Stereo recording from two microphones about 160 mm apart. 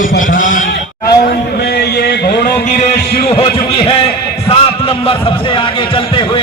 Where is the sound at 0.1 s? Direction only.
55° left (ahead or behind).